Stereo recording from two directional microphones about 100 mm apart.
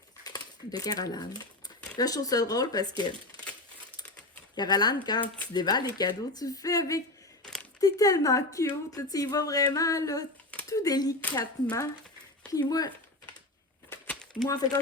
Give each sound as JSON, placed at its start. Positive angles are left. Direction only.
{"t": 0.3, "sound": "speech", "side_deg": 40}
{"t": 4.5, "sound": "a woman's voice", "side_deg": 45}
{"t": 7.4, "sound": "a sound", "side_deg": 10}
{"t": 7.8, "sound": "a woman's voice", "side_deg": 35}
{"t": 14.4, "sound": "a woman's voice", "side_deg": 40}